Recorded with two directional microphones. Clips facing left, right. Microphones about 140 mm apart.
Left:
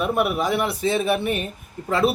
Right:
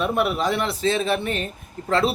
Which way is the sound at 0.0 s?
10° left (ahead or behind).